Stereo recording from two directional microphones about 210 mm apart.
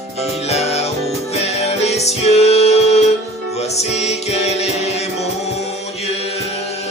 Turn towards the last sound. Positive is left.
turn(degrees=30)  # may be behind; listen again after turning